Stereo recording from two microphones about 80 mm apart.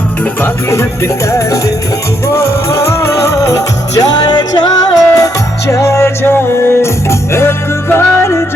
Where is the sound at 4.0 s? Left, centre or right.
Left.